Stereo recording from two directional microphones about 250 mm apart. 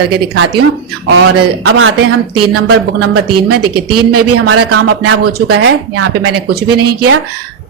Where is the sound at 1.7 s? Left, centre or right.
Right.